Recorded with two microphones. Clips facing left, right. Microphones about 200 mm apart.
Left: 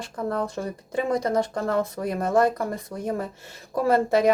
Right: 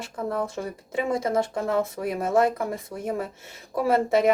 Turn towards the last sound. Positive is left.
turn(degrees=0)  # may be behind; listen again after turning